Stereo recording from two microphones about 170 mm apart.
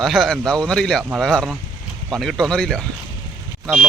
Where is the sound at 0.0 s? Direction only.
Centre (ahead or behind).